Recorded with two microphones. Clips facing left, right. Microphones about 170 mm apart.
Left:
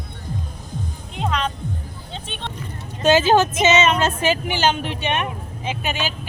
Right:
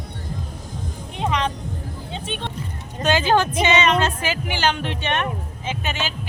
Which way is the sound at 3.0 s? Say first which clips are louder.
Left 4 dB; 20° left (ahead or behind).